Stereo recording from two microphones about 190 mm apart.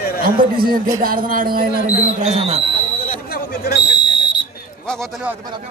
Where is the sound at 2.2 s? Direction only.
35° right (ahead or behind).